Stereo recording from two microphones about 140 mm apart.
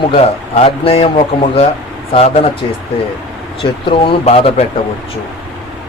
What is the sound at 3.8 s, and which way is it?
Speech, 40° left (ahead or behind).